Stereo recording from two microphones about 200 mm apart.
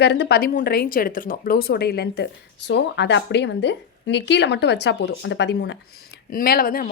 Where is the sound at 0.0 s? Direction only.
55° left (ahead or behind).